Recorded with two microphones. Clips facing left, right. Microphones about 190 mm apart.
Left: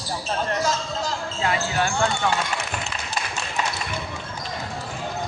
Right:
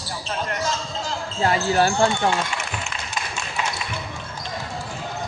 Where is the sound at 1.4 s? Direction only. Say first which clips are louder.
Right 5 dB; 35° right (ahead or behind).